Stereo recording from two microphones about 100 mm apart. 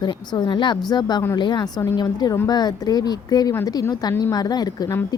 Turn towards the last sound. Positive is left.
turn(degrees=40)  # may be behind; listen again after turning